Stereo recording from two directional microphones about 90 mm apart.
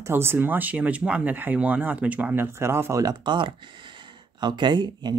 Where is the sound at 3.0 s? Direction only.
60° right (ahead or behind).